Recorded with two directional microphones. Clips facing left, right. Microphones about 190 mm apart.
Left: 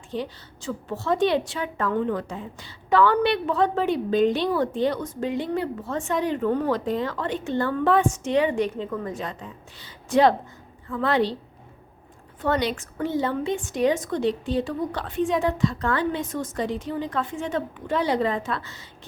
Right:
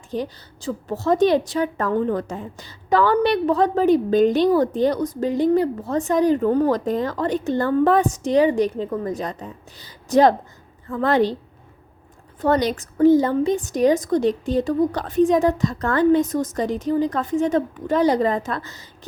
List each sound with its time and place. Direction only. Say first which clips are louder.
0.1 s a woman's voice: right 4 dB; 40° right (ahead or behind)
12.4 s a woman's voice: right 5 dB; 40° right (ahead or behind)